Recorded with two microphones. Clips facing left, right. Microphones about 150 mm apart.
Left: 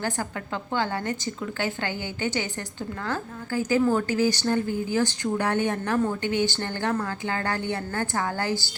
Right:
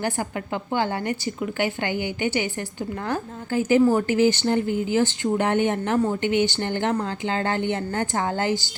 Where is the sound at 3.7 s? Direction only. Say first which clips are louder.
Right 4 dB; 15° right (ahead or behind).